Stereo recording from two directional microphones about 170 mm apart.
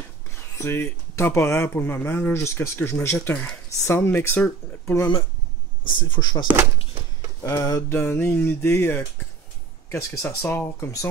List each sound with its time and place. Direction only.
0.6 s speech: 15° left (ahead or behind)
5.9 s speech: 30° left (ahead or behind)
6.4 s speech: 15° right (ahead or behind)
7.4 s speech: 20° left (ahead or behind)